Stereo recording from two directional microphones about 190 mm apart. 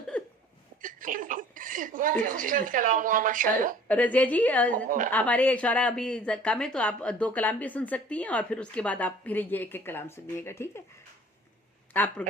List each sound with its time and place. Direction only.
0.8 s a sound: 45° right (ahead or behind)
3.8 s speech: 5° left (ahead or behind)
4.9 s a woman's voice: 45° right (ahead or behind)
5.1 s speech: 10° left (ahead or behind)
11.9 s speech: 10° left (ahead or behind)